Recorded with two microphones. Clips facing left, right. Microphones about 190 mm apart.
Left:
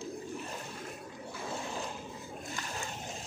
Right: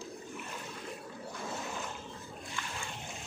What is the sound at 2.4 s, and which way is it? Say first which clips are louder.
Splash: left 2 dB; 40° left (ahead or behind).